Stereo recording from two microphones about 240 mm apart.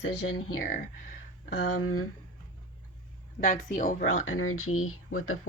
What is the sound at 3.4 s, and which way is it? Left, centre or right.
Speech, left.